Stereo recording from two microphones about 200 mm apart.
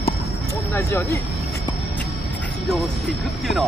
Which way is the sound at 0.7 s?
15° left (ahead or behind).